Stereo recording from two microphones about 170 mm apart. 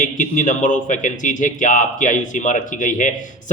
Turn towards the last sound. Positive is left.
turn(degrees=50)  # may be behind; listen again after turning